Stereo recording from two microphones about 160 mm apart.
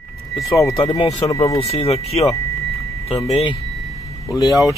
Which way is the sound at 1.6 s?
40° left (ahead or behind).